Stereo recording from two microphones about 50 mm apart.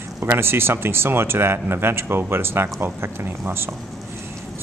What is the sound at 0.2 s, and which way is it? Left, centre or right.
Speech, right.